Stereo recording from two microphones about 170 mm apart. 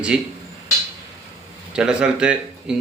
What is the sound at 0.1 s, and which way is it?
Speech, 5° right (ahead or behind).